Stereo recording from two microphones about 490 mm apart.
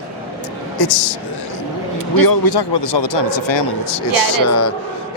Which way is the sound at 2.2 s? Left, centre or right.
Left.